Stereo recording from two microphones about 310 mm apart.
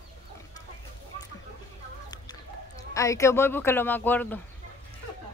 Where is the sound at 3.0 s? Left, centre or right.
Centre.